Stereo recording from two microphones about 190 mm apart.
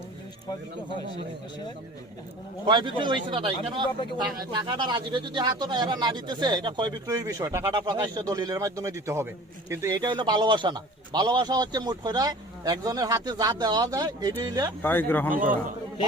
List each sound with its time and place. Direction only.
2.6 s a man's voice: 25° right (ahead or behind)
14.8 s speech: 10° left (ahead or behind)
15.4 s a man's voice: 45° right (ahead or behind)